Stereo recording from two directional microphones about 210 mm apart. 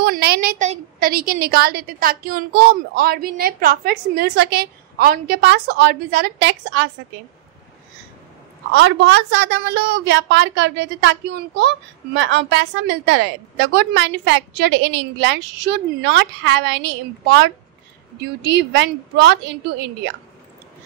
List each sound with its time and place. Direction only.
0.0 s a woman's voice: 50° right (ahead or behind)
8.7 s a woman's voice: 60° right (ahead or behind)
18.2 s a woman's voice: 55° right (ahead or behind)